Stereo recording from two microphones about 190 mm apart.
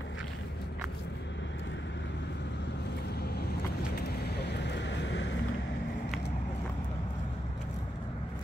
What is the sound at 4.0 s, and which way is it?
Vehicle, 65° left (ahead or behind).